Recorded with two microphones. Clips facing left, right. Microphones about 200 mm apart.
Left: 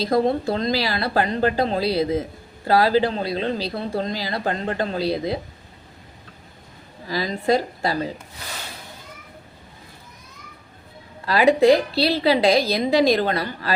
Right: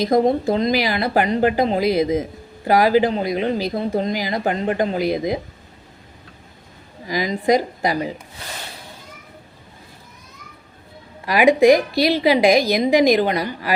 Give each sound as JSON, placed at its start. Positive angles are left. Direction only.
{"t": 0.0, "sound": "speech", "side_deg": -20}
{"t": 7.1, "sound": "speech", "side_deg": -15}
{"t": 11.3, "sound": "speech", "side_deg": -15}